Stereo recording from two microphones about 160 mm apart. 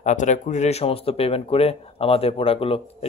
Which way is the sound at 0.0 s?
50° left (ahead or behind).